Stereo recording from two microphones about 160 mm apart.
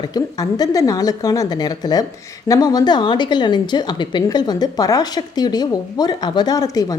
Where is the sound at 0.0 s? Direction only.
25° left (ahead or behind).